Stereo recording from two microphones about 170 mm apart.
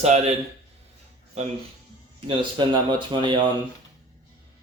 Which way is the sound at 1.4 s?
40° right (ahead or behind).